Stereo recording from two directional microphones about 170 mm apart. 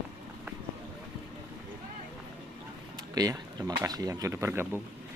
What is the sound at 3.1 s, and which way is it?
Speech, 20° right (ahead or behind).